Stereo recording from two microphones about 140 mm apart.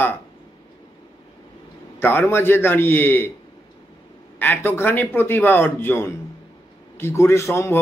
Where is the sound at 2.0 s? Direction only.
15° left (ahead or behind).